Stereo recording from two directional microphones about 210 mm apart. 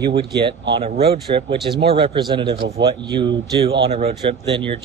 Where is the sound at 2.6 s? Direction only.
55° right (ahead or behind).